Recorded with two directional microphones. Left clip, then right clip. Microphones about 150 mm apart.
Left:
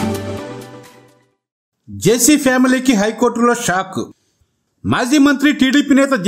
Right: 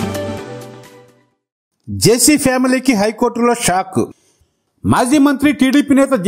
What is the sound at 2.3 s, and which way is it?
Speech, 30° right (ahead or behind).